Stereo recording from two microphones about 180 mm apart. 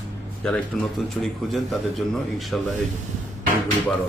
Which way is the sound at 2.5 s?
Centre (ahead or behind).